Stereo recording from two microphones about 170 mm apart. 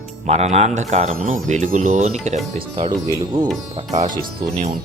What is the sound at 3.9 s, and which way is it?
Speech, 45° right (ahead or behind).